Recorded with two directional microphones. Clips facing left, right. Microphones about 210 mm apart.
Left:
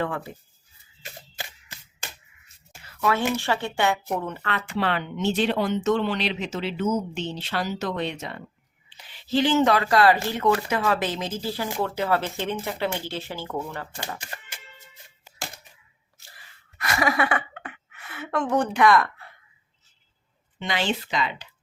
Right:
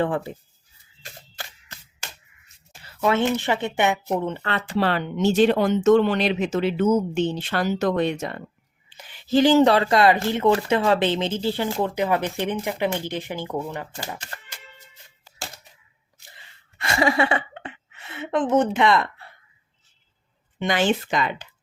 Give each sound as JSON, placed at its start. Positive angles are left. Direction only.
{"t": 1.4, "sound": "single-lens reflex camera", "side_deg": 15}
{"t": 2.8, "sound": "speech", "side_deg": -25}
{"t": 16.3, "sound": "a sound", "side_deg": -25}
{"t": 20.6, "sound": "speech", "side_deg": -50}